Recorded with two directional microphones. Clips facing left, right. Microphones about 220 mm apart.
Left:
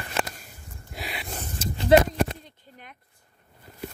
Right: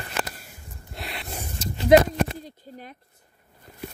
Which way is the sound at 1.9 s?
15° right (ahead or behind).